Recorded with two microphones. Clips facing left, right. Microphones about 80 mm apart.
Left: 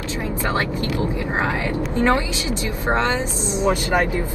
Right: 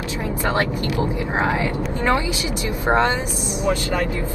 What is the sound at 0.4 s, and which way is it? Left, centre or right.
Vehicle, right.